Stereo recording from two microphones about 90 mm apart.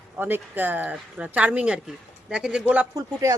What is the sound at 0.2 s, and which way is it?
Speech, 25° right (ahead or behind).